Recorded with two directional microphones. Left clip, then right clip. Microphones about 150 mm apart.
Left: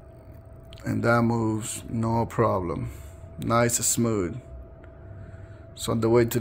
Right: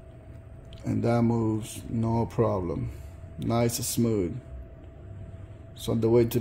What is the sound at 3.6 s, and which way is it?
Speech, 20° right (ahead or behind).